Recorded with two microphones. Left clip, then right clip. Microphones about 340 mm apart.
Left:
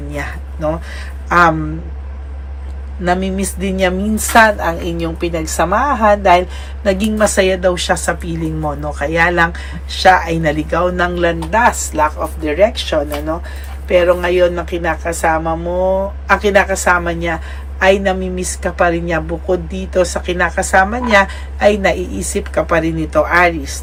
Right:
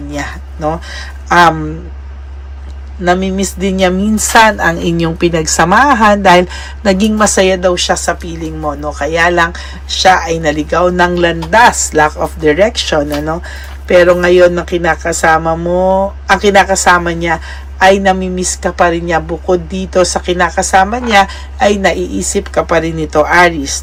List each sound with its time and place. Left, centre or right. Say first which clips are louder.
0.1 s speech: right 3 dB; centre
3.0 s a woman's voice: right 4 dB; centre
12.4 s a woman's voice: right 4 dB; right